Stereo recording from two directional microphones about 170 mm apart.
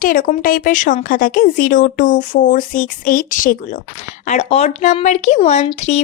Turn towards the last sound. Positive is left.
turn(degrees=40)  # may be behind; listen again after turning